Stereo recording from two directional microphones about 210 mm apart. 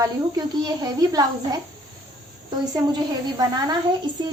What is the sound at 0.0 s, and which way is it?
Speech, 20° right (ahead or behind).